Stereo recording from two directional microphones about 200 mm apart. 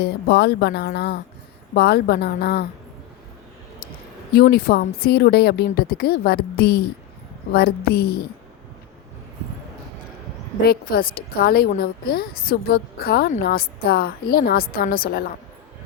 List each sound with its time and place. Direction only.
0.0 s a woman's voice: 55° left (ahead or behind)
4.4 s speech: 50° left (ahead or behind)
11.1 s speech: 50° left (ahead or behind)